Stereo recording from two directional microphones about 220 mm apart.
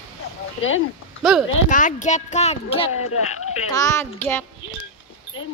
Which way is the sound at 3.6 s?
15° left (ahead or behind).